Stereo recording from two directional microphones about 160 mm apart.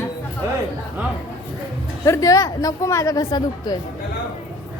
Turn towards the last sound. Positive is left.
turn(degrees=25)  # may be behind; listen again after turning